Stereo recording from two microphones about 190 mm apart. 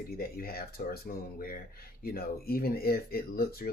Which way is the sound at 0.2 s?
50° left (ahead or behind).